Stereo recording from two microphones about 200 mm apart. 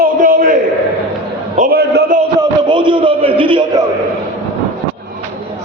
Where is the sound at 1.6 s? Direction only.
50° right (ahead or behind).